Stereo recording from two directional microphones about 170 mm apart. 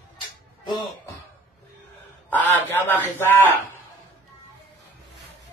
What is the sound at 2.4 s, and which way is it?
Speech, 10° left (ahead or behind).